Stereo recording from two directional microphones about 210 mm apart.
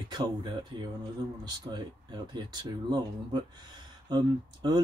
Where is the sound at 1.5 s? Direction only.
20° right (ahead or behind).